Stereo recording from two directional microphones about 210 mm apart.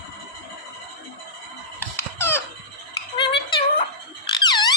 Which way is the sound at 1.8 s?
10° left (ahead or behind).